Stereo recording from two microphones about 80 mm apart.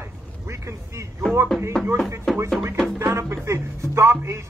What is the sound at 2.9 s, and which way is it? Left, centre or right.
Speech, right.